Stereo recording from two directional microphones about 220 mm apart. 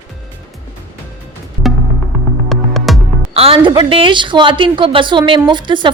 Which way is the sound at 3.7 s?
20° right (ahead or behind).